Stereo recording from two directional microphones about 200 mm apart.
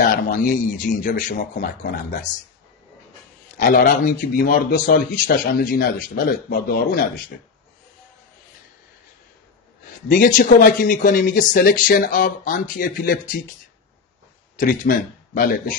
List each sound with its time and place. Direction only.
0.0 s a man's voice: 45° left (ahead or behind)
3.5 s a man's voice: 45° left (ahead or behind)
10.1 s a man's voice: 45° left (ahead or behind)
14.6 s speech: 45° left (ahead or behind)